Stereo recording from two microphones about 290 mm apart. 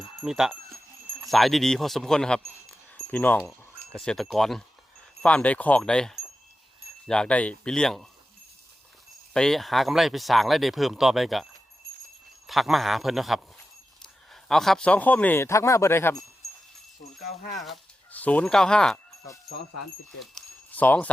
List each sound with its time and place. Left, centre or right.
0.2 s speech: centre
9.3 s speech: centre
12.5 s speech: centre
17.5 s speech: centre
19.7 s speech: left
20.3 s a sound: centre